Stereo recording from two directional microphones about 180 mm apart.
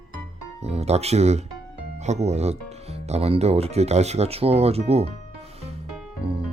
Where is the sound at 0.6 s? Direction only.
35° right (ahead or behind).